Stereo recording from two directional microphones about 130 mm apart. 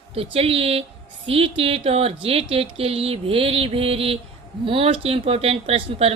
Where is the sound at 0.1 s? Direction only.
50° right (ahead or behind).